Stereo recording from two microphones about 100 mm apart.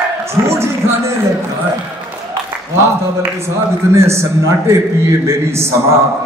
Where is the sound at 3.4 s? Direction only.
25° right (ahead or behind).